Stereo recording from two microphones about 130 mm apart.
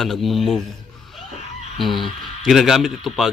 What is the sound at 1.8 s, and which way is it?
Speech, centre (ahead or behind).